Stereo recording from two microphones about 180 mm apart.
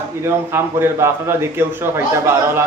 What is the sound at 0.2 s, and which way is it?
A man's voice, 15° right (ahead or behind).